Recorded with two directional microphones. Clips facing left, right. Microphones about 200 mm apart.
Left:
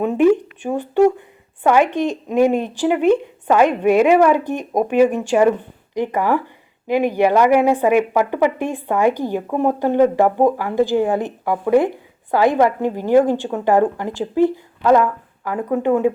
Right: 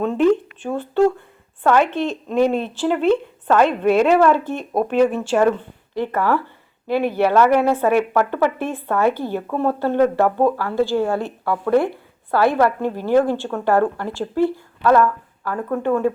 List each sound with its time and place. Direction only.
0.0 s a woman's voice: 15° left (ahead or behind)